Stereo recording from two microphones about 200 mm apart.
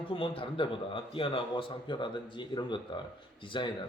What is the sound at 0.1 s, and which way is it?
Speech, 25° left (ahead or behind).